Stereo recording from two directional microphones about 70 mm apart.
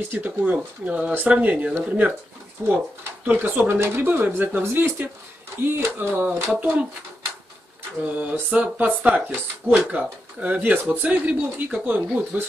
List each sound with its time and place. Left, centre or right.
0.1 s speech: right
2.6 s speech: right
8.0 s speech: right